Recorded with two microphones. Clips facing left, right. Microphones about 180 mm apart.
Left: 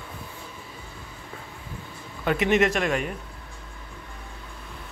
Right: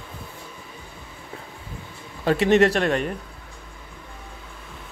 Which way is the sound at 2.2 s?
35° right (ahead or behind).